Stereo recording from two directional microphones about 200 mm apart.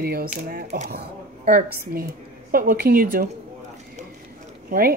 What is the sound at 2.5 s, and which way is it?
Speech, 45° right (ahead or behind).